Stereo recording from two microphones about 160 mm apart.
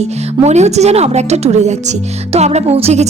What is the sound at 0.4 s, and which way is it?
A woman's voice, 45° right (ahead or behind).